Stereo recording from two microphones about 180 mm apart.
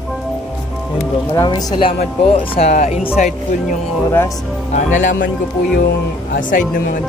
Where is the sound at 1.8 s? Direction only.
30° left (ahead or behind).